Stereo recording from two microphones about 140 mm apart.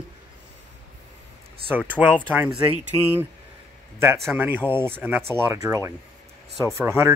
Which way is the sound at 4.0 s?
15° right (ahead or behind).